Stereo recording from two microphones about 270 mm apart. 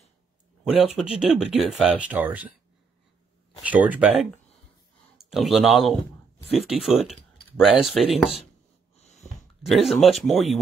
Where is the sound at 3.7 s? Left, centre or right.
Centre.